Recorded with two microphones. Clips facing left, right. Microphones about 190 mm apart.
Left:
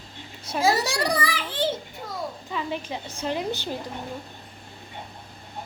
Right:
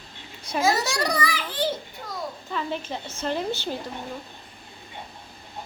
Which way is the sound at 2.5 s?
10° left (ahead or behind).